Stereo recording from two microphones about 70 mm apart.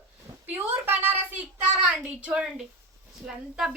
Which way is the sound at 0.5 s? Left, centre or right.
Right.